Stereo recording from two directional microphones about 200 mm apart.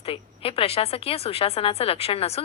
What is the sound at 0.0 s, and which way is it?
A woman's voice, 30° left (ahead or behind).